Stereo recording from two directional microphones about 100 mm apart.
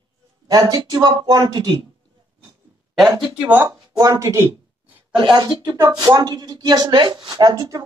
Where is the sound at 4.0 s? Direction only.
35° right (ahead or behind).